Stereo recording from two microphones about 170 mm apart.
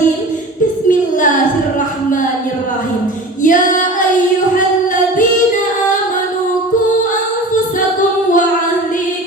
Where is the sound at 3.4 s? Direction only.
50° left (ahead or behind).